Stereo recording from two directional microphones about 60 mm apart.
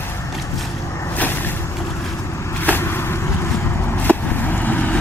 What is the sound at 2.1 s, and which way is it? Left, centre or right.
Vehicle, left.